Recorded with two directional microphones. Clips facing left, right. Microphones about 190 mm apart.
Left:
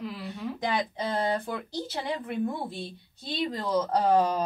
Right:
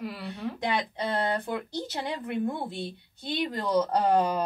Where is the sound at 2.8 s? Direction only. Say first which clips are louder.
Right 2 dB; 60° right (ahead or behind).